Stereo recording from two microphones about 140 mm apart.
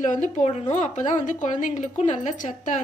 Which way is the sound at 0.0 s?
65° left (ahead or behind).